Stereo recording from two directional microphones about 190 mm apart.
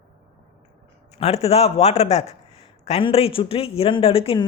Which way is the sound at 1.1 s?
35° left (ahead or behind).